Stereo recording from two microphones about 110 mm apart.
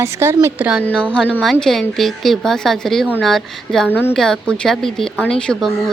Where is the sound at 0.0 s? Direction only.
25° right (ahead or behind).